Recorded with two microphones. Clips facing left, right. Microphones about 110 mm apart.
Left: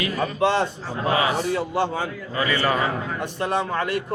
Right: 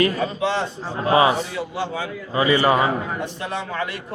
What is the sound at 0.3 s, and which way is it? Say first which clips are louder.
A man's voice: left 2 dB; 50° left (ahead or behind).